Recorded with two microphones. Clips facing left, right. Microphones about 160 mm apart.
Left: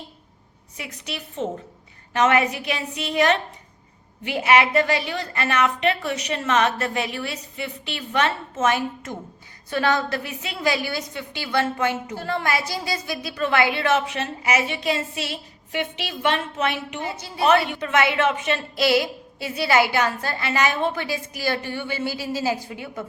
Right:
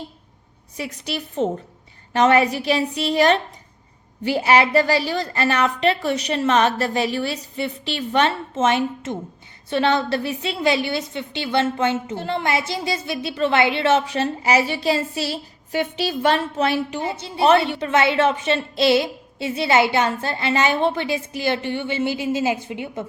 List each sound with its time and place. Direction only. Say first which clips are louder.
0.8 s a woman's voice: right 6 dB; 35° right (ahead or behind)